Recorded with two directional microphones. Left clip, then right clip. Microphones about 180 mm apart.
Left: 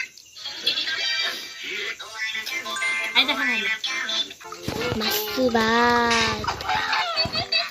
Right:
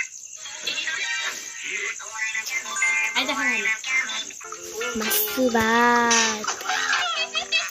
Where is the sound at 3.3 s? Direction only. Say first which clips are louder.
Even; 45° left (ahead or behind).